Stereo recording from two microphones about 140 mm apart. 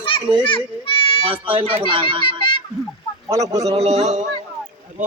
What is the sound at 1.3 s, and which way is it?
Speech, 40° right (ahead or behind).